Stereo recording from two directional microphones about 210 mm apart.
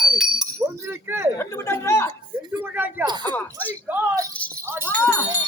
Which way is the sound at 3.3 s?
10° left (ahead or behind).